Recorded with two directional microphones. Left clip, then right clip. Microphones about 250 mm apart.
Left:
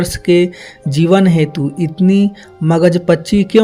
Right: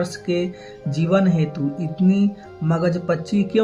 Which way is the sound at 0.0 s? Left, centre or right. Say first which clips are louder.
Left 11 dB; left.